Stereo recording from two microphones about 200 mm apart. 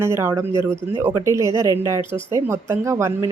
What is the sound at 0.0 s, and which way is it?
Speech, 15° right (ahead or behind).